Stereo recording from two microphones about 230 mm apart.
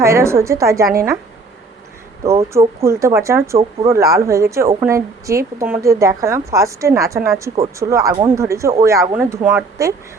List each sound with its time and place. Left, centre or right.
0.0 s a woman's voice: centre
2.2 s a woman's voice: centre